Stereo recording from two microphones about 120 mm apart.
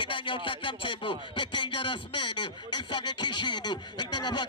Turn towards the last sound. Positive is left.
turn(degrees=40)  # may be behind; listen again after turning